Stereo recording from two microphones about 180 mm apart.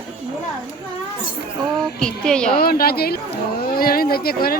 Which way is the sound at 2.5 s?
55° left (ahead or behind).